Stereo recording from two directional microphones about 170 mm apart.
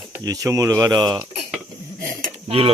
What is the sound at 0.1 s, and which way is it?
Speech, 20° right (ahead or behind).